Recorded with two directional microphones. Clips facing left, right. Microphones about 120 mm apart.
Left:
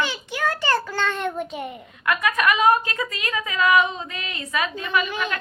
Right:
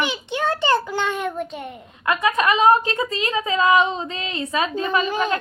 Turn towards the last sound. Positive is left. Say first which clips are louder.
# right 4 dB
turn(degrees=-35)  # may be behind; listen again after turning